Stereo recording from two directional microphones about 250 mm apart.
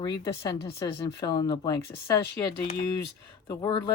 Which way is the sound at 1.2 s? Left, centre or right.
Centre.